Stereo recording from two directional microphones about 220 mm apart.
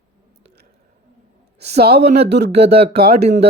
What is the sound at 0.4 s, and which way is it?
Squish, 50° right (ahead or behind).